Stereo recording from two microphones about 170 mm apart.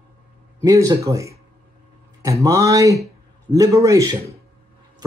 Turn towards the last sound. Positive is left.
turn(degrees=-20)  # may be behind; listen again after turning